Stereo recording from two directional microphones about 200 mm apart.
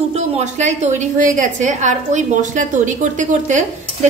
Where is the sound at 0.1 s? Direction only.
35° right (ahead or behind).